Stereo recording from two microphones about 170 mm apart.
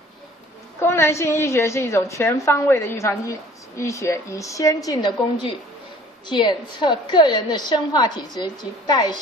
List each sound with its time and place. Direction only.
0.7 s a woman's voice: 15° left (ahead or behind)